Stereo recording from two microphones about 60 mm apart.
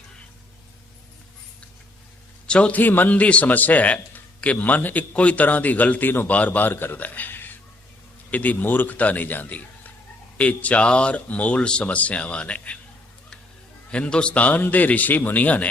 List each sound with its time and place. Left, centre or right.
2.5 s a man's voice: centre
2.8 s a man's voice: left
13.9 s a man's voice: centre